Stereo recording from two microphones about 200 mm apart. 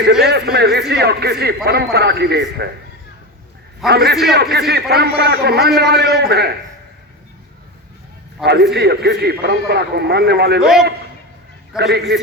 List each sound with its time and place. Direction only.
0.0 s a man's voice: 55° right (ahead or behind)
3.8 s a man's voice: 55° right (ahead or behind)
8.4 s a man's voice: 55° right (ahead or behind)
10.6 s a man's voice: centre (ahead or behind)
11.8 s a man's voice: 55° right (ahead or behind)